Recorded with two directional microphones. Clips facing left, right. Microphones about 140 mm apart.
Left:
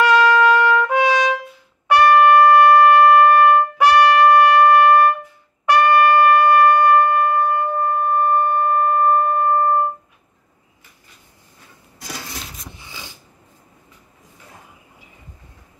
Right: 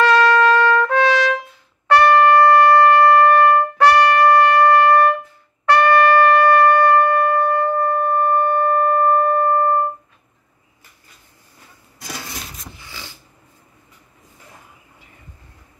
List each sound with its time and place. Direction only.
0.0 s trumpet: 10° left (ahead or behind)
5.7 s shofar: 15° left (ahead or behind)
12.8 s a sound: 15° left (ahead or behind)